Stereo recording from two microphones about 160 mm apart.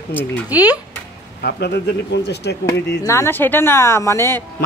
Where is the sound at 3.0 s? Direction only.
20° left (ahead or behind).